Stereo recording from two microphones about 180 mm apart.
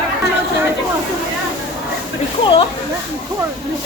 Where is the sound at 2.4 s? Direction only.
30° left (ahead or behind).